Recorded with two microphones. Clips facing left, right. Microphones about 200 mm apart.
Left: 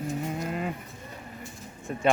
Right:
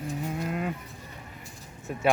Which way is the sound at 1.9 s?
5° right (ahead or behind).